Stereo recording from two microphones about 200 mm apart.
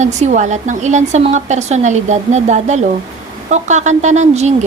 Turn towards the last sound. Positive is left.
turn(degrees=-35)  # may be behind; listen again after turning